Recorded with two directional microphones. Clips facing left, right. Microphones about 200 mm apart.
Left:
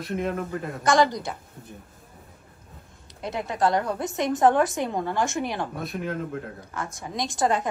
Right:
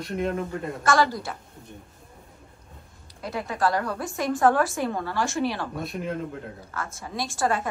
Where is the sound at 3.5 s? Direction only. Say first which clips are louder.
Left 2 dB; 20° left (ahead or behind).